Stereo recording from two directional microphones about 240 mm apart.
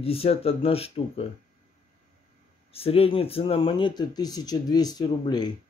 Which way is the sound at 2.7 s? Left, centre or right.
Left.